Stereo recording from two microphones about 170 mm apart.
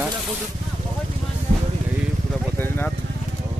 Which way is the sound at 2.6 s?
10° left (ahead or behind).